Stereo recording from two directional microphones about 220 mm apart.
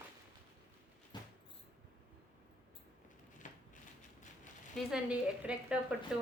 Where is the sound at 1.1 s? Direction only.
20° left (ahead or behind).